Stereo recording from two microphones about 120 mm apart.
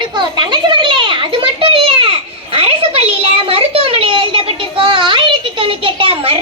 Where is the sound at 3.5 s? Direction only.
55° right (ahead or behind).